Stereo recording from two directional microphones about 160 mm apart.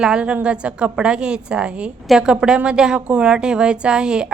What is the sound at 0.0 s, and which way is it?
A woman's voice, 5° right (ahead or behind).